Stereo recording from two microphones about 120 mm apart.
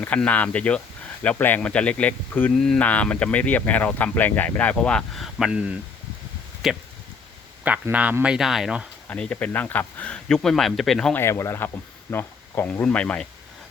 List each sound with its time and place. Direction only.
0.0 s speech: 10° left (ahead or behind)
7.6 s speech: 15° right (ahead or behind)
9.0 s speech: 10° left (ahead or behind)
11.1 s speech: 20° left (ahead or behind)
12.8 s speech: 10° left (ahead or behind)